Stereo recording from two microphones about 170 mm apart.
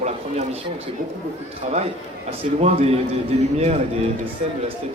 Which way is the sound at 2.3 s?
35° right (ahead or behind).